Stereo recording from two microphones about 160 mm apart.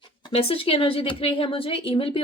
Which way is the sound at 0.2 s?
35° left (ahead or behind).